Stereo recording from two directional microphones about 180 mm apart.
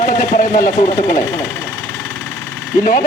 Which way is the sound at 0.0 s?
45° left (ahead or behind).